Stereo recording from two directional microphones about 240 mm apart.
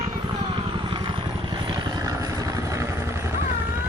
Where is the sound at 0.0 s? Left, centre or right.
Centre.